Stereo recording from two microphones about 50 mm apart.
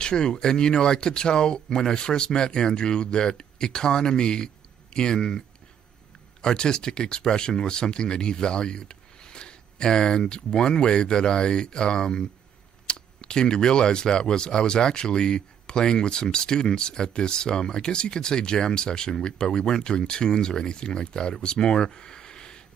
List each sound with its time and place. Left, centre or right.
0.0 s speech: centre
6.4 s speech: centre